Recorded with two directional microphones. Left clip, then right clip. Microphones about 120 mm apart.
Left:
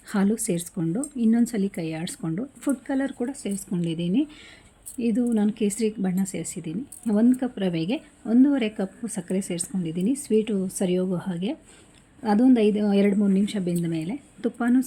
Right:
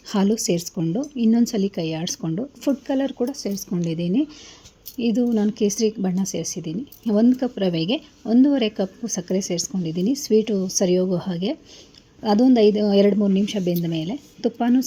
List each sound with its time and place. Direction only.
0.1 s speech: 15° right (ahead or behind)